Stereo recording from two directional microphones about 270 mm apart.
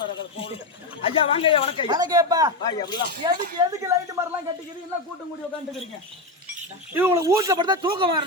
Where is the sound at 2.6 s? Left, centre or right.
Centre.